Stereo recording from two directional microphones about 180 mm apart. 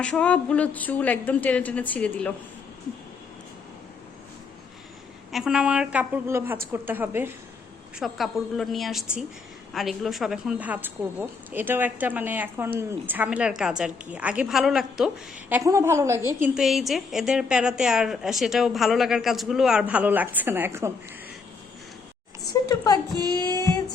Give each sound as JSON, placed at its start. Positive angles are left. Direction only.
{"t": 0.0, "sound": "a woman's voice", "side_deg": 5}
{"t": 5.3, "sound": "a woman's voice", "side_deg": -5}
{"t": 7.9, "sound": "a woman's voice", "side_deg": 0}
{"t": 16.4, "sound": "a woman's voice", "side_deg": 0}
{"t": 22.7, "sound": "speech", "side_deg": 20}
{"t": 23.4, "sound": "female singing", "side_deg": 20}